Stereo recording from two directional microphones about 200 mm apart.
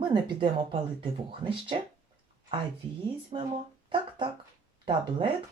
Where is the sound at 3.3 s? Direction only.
30° right (ahead or behind).